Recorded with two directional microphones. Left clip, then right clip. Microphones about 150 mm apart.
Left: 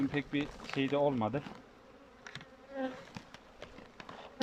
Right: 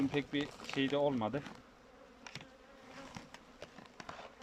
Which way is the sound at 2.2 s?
10° right (ahead or behind).